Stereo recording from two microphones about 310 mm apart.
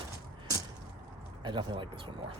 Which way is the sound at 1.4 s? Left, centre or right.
Centre.